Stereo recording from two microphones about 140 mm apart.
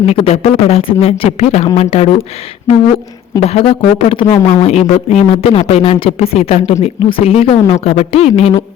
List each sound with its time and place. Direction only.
0.0 s speech: 50° left (ahead or behind)
3.4 s speech: 45° left (ahead or behind)